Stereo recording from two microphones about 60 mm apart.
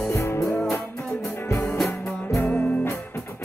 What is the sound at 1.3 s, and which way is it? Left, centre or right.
Music, left.